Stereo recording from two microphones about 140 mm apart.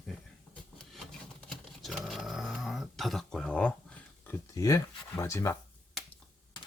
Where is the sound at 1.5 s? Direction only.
Centre (ahead or behind).